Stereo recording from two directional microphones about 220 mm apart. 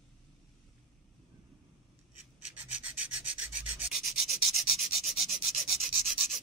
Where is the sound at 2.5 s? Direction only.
10° right (ahead or behind).